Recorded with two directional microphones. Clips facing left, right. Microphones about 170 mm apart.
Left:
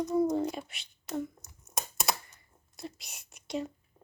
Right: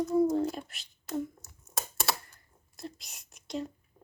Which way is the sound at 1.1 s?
20° left (ahead or behind).